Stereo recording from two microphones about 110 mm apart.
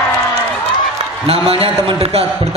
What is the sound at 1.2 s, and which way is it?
Speech, 60° right (ahead or behind).